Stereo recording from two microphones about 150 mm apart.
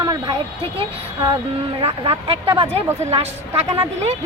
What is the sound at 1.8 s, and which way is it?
Speech, 40° right (ahead or behind).